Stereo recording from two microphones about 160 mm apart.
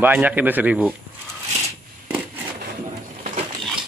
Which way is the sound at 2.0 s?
10° right (ahead or behind).